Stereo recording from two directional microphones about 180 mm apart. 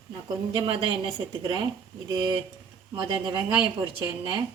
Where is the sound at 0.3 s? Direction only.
25° right (ahead or behind).